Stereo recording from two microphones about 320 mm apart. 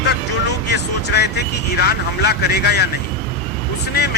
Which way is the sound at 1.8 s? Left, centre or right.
Left.